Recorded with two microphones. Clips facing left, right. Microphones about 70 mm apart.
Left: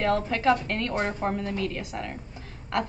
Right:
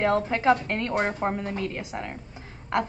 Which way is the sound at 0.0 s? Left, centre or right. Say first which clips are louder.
Right 1 dB; right.